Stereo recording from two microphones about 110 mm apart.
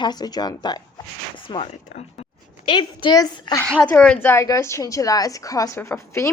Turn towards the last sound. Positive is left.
turn(degrees=25)  # may be behind; listen again after turning